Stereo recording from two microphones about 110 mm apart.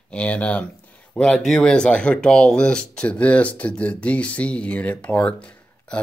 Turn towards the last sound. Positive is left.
turn(degrees=10)  # may be behind; listen again after turning